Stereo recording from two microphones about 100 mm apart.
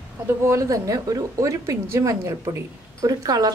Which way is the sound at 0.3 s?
30° right (ahead or behind).